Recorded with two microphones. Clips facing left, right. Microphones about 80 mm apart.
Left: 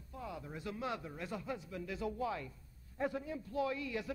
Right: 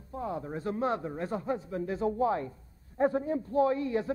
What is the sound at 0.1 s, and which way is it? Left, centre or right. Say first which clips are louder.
A man's voice: right 10 dB; right.